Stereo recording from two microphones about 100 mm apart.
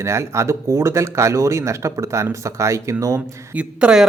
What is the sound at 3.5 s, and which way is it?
Speech, 10° right (ahead or behind).